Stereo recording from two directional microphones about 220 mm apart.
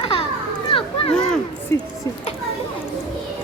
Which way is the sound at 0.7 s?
25° left (ahead or behind).